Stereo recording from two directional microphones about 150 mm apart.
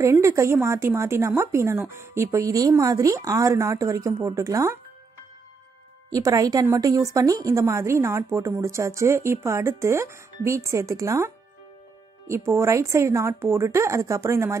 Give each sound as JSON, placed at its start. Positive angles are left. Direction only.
{"t": 0.0, "sound": "a woman's voice", "side_deg": -20}
{"t": 6.1, "sound": "a woman's voice", "side_deg": -25}